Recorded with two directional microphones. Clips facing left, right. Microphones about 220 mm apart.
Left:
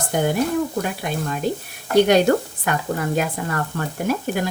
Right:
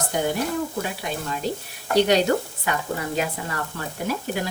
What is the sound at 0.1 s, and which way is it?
Speech, 50° left (ahead or behind).